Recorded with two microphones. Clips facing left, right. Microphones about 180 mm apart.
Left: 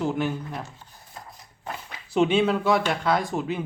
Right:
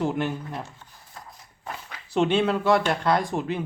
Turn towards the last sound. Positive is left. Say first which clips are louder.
# right 1 dB
turn(degrees=5)  # may be behind; listen again after turning